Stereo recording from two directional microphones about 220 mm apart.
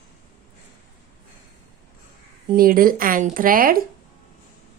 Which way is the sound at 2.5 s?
40° right (ahead or behind).